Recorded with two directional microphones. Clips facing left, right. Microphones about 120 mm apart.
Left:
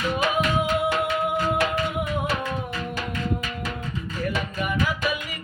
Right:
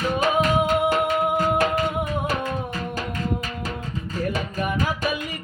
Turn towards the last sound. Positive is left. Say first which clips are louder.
# right 1 dB
turn(degrees=-35)  # may be behind; listen again after turning